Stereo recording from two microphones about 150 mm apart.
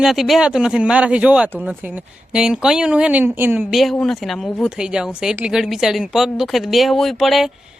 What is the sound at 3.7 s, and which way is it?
Speech, centre (ahead or behind).